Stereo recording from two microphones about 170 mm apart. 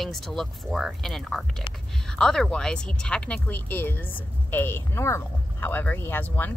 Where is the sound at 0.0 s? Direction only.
Centre (ahead or behind).